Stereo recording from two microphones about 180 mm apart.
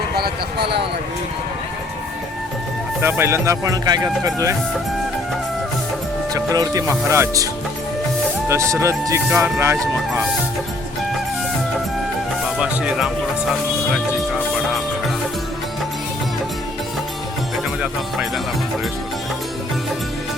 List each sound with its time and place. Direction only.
0.2 s speech: 65° right (ahead or behind)
3.0 s speech: 15° right (ahead or behind)
6.3 s speech: 20° right (ahead or behind)
8.4 s speech: 15° right (ahead or behind)
12.5 s speech: 5° right (ahead or behind)
13.9 s music: 5° right (ahead or behind)